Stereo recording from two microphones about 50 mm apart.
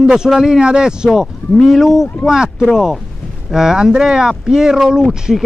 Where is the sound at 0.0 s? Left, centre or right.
Centre.